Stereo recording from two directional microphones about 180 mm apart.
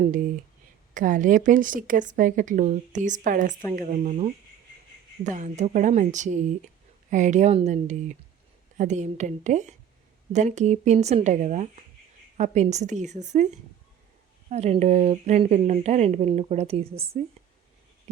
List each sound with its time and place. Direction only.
0.9 s a woman's voice: 45° right (ahead or behind)